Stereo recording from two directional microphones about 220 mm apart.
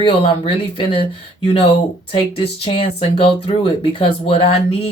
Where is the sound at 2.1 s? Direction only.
25° left (ahead or behind).